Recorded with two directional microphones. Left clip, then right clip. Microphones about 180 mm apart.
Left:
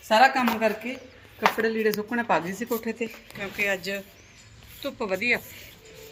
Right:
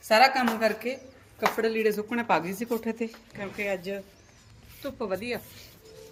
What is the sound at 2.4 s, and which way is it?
Speech, 30° right (ahead or behind).